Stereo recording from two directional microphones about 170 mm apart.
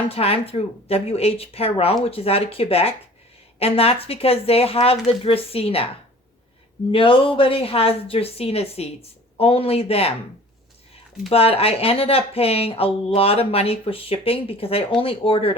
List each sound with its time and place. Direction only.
0.1 s speech: 35° left (ahead or behind)
6.9 s speech: 30° left (ahead or behind)
11.3 s speech: 35° left (ahead or behind)